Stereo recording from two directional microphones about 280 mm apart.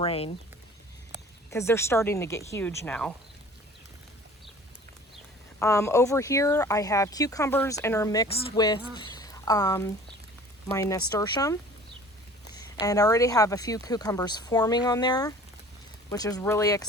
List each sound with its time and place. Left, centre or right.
0.0 s speech: left
1.5 s speech: centre
5.5 s speech: centre
12.8 s speech: centre